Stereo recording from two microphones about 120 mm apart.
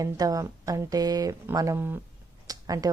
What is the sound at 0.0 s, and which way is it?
Speech, 30° right (ahead or behind).